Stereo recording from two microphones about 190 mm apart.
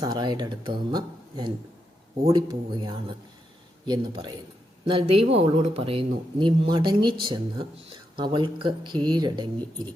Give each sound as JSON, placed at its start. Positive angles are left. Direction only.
{"t": 0.0, "sound": "speech", "side_deg": -25}